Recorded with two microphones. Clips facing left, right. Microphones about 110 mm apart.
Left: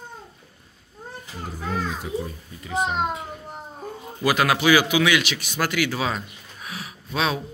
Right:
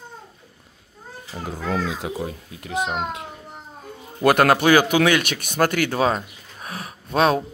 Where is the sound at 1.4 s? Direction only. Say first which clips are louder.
Right 3 dB; 90° right.